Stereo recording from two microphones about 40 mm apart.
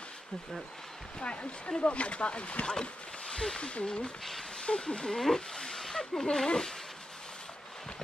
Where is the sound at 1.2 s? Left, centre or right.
Left.